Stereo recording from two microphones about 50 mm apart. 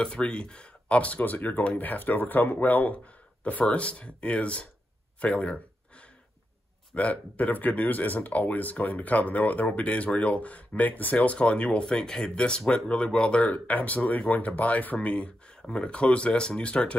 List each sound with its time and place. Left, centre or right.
0.0 s speech: centre
5.2 s a sound: left
7.0 s speech: left
11.1 s speech: left
13.5 s speech: left